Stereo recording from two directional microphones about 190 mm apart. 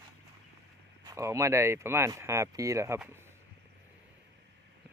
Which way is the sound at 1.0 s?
15° right (ahead or behind).